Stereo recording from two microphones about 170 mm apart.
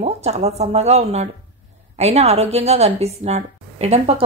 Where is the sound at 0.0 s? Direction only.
40° right (ahead or behind).